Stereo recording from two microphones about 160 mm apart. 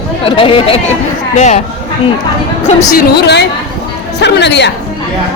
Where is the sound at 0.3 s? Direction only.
35° left (ahead or behind).